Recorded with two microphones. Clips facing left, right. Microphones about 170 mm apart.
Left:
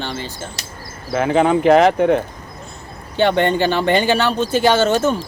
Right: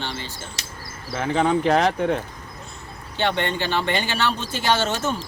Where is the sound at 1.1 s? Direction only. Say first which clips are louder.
Left 7 dB; 60° left (ahead or behind).